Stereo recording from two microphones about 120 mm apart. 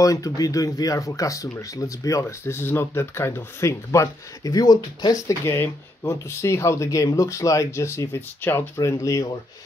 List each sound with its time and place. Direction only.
0.0 s speech: 30° left (ahead or behind)
5.4 s speech: 20° left (ahead or behind)